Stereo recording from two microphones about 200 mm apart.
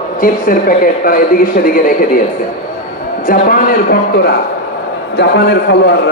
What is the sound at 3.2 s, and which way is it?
A man's voice, 45° left (ahead or behind).